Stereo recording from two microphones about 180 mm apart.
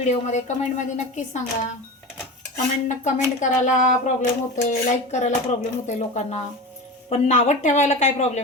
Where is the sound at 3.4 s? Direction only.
40° left (ahead or behind).